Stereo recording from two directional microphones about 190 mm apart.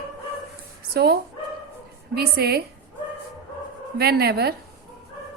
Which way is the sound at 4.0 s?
55° right (ahead or behind).